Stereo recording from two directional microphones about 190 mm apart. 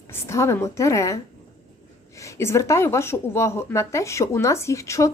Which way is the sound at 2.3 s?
15° left (ahead or behind).